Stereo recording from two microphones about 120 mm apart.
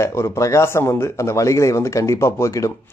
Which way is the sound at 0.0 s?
25° left (ahead or behind).